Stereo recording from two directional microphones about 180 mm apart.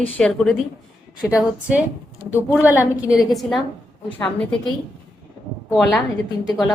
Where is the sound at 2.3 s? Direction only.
10° right (ahead or behind).